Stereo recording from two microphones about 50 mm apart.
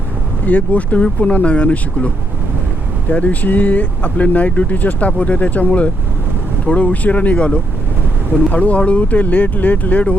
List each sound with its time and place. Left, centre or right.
0.4 s speech: left
3.1 s speech: left